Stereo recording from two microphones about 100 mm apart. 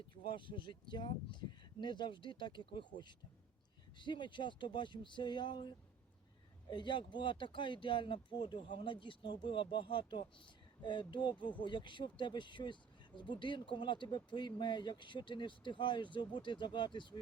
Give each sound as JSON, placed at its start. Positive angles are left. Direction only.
{"t": 0.3, "sound": "speech", "side_deg": 55}